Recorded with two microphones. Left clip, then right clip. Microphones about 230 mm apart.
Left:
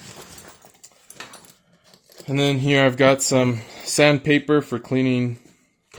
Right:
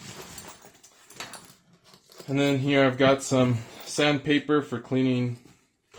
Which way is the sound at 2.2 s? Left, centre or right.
Left.